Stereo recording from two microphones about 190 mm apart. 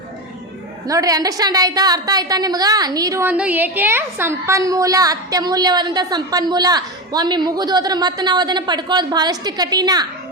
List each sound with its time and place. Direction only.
0.9 s a woman's voice: 20° right (ahead or behind)